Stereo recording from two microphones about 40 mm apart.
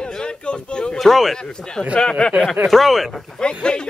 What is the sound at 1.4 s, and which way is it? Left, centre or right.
Speech, centre.